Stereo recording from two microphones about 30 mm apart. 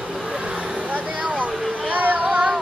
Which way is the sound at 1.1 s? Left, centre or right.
Right.